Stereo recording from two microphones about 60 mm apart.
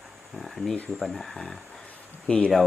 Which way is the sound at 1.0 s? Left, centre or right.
Centre.